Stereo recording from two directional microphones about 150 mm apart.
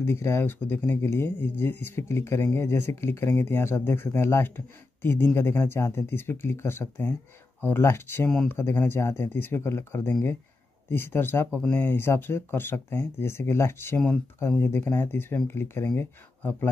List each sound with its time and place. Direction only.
0.0 s speech: 20° left (ahead or behind)
8.3 s speech: 5° left (ahead or behind)
8.5 s speech: 15° left (ahead or behind)